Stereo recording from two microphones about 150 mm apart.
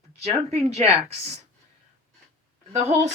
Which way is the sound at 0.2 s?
45° right (ahead or behind).